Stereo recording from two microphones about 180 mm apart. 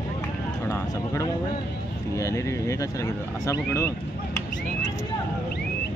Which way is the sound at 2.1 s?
15° left (ahead or behind).